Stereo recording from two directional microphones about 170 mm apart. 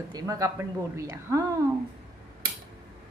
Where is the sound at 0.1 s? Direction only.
20° right (ahead or behind).